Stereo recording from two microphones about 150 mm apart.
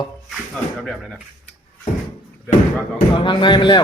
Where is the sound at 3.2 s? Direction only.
35° left (ahead or behind).